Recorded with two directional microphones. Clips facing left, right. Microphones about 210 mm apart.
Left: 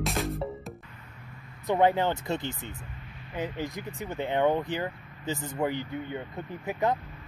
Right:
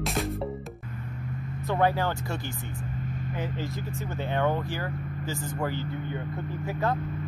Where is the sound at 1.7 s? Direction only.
20° left (ahead or behind).